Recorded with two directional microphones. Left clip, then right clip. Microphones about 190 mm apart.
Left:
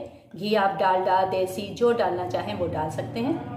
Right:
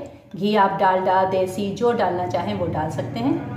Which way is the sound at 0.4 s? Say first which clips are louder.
Right 4 dB; 15° left (ahead or behind).